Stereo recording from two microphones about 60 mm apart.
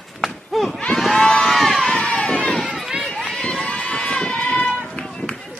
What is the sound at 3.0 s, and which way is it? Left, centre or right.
Run, centre.